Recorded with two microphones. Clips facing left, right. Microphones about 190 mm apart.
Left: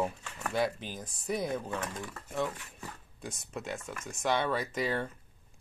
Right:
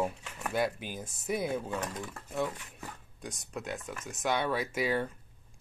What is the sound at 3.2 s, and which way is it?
Speech, centre (ahead or behind).